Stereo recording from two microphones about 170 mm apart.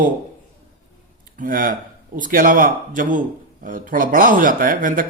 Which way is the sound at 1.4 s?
55° right (ahead or behind).